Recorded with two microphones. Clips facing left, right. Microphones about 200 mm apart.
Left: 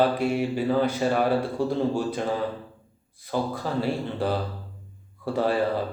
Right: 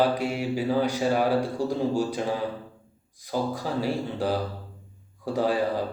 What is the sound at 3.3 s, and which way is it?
Speech, 10° right (ahead or behind).